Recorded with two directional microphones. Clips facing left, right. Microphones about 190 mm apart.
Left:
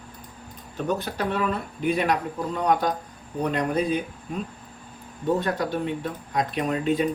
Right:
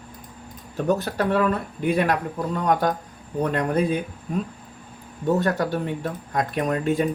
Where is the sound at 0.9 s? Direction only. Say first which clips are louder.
Right 5 dB; 45° right (ahead or behind).